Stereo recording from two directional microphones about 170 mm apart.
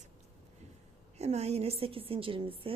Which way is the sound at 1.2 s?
40° right (ahead or behind).